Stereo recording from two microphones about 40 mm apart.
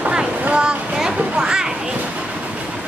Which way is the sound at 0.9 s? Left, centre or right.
Right.